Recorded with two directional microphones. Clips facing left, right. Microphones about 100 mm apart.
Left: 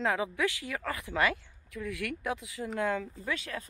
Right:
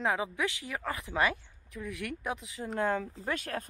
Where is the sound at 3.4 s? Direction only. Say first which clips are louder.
Right 3 dB; 50° right (ahead or behind).